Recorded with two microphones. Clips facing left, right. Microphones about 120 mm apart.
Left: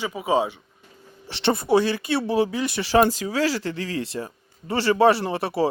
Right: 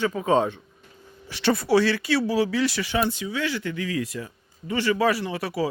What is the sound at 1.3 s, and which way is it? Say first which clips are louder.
Speech: left 1 dB; 25° left (ahead or behind).